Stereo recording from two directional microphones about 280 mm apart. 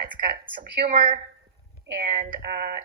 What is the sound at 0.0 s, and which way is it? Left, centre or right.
A woman's voice, right.